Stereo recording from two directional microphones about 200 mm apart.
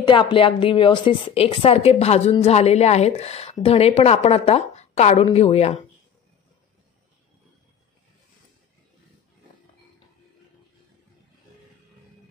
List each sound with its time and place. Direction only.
0.0 s a woman's voice: 25° left (ahead or behind)